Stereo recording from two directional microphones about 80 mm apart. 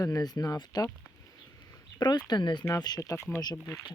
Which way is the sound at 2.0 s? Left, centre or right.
Left.